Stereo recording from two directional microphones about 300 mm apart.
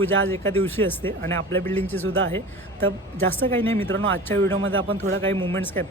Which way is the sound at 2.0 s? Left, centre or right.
Right.